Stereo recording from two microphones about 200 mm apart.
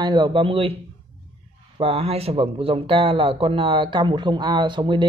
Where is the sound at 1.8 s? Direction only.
30° right (ahead or behind).